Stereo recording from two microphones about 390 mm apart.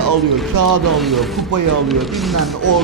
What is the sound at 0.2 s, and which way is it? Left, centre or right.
Speech, centre.